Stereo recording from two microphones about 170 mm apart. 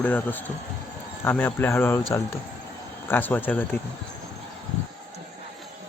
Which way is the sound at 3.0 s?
10° left (ahead or behind).